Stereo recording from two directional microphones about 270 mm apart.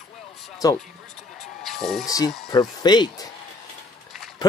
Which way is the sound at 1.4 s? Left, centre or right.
Centre.